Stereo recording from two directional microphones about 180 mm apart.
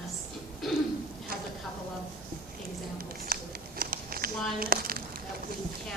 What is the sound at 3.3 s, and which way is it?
Scissors, 55° right (ahead or behind).